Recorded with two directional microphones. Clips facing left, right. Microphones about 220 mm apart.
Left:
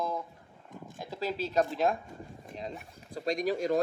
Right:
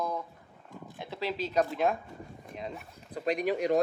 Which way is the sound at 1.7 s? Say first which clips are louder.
Even; 35° left (ahead or behind).